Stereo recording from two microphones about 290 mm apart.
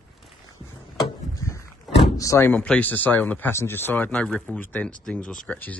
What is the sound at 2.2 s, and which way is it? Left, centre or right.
Speech, centre.